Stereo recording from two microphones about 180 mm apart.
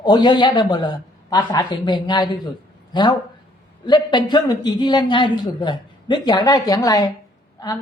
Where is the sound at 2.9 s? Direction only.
25° left (ahead or behind).